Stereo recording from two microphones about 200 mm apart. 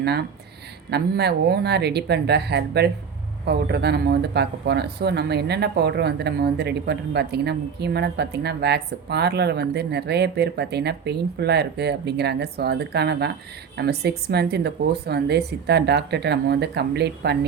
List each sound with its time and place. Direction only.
0.0 s speech: 55° right (ahead or behind)